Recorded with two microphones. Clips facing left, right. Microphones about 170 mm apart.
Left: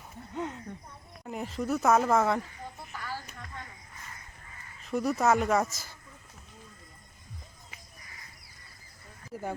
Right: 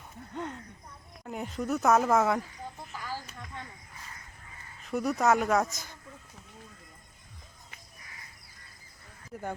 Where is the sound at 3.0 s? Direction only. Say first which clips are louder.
Even; 15° right (ahead or behind).